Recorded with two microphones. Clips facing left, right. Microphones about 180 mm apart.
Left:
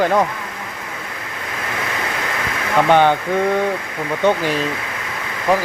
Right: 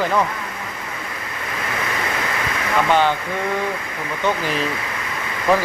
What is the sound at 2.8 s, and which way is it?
Speech, 55° left (ahead or behind).